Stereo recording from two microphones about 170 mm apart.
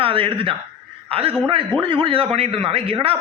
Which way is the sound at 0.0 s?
30° right (ahead or behind).